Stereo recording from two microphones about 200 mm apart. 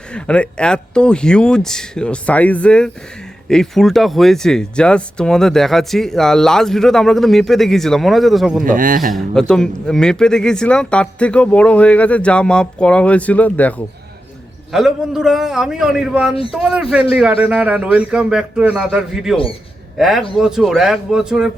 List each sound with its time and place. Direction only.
0.1 s speech: 5° left (ahead or behind)
8.6 s a man's voice: 45° right (ahead or behind)
9.1 s speech: 5° left (ahead or behind)